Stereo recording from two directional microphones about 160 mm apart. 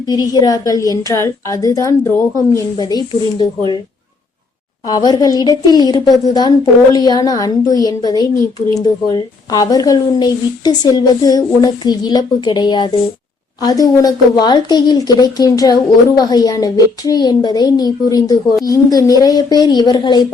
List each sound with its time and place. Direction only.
0.1 s a woman's voice: 25° left (ahead or behind)
4.9 s a woman's voice: 25° left (ahead or behind)